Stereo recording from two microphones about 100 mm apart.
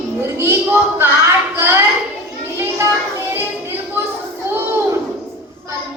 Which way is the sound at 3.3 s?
25° right (ahead or behind).